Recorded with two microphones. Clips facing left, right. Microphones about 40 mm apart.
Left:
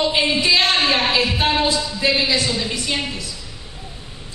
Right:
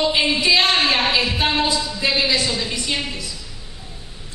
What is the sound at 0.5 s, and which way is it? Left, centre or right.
A woman's voice, centre.